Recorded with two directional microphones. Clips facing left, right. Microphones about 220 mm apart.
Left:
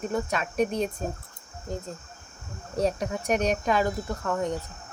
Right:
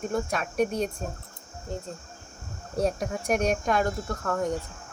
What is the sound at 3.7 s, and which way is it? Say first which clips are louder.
Speech: left 1 dB; 5° left (ahead or behind).